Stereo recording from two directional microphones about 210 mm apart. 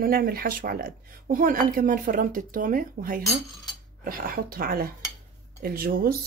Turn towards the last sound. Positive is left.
turn(degrees=-45)  # may be behind; listen again after turning